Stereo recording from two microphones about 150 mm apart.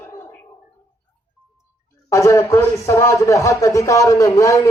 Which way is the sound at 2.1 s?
20° left (ahead or behind).